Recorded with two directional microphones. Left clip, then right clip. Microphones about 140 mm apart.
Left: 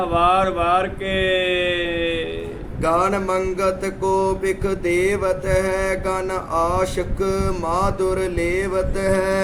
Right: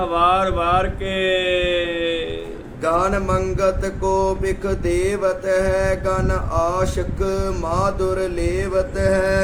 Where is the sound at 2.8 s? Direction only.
30° left (ahead or behind).